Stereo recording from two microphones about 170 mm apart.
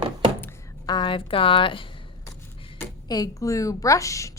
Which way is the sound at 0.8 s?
30° left (ahead or behind).